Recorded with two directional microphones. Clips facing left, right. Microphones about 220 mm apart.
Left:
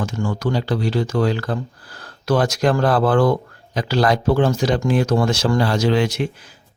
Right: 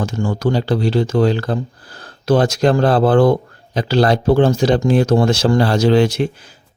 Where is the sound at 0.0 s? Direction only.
30° right (ahead or behind).